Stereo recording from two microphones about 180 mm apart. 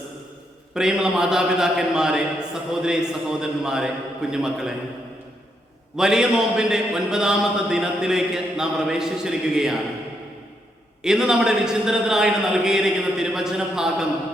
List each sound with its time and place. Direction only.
0.7 s a man's voice: 5° right (ahead or behind)
6.0 s a man's voice: 5° right (ahead or behind)
11.0 s a man's voice: 5° right (ahead or behind)